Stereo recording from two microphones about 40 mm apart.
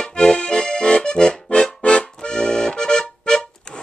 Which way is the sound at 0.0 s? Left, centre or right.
Centre.